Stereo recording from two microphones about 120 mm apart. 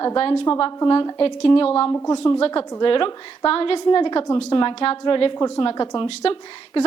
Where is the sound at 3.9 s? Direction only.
40° left (ahead or behind).